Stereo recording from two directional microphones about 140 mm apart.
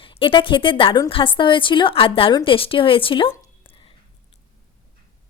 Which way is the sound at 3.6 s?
40° left (ahead or behind).